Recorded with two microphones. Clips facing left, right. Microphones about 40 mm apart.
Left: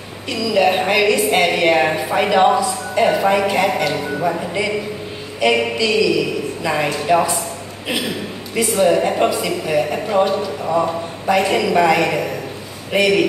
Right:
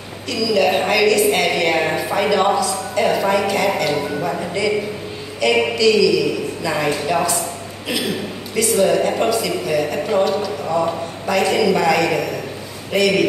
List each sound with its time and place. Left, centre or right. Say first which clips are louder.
0.3 s a woman's voice: left 1 dB; left
1.9 s speech: left 1 dB; centre
2.1 s speech: left 3 dB; centre
8.5 s a woman's voice: left 1 dB; centre